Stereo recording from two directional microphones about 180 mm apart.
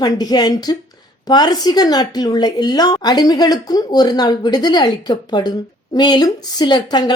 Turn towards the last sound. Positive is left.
turn(degrees=25)  # may be behind; listen again after turning